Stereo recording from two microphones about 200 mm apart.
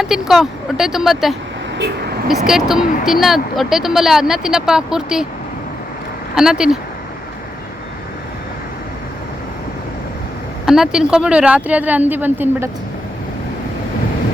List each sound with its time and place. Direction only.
0.0 s speech: centre (ahead or behind)
6.3 s speech: 5° right (ahead or behind)
10.7 s speech: 5° right (ahead or behind)